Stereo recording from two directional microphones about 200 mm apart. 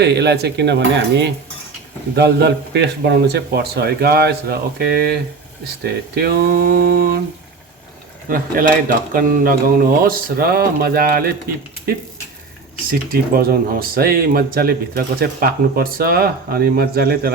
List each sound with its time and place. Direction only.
0.0 s speech: 55° right (ahead or behind)
8.3 s speech: 45° right (ahead or behind)
12.9 s speech: 45° right (ahead or behind)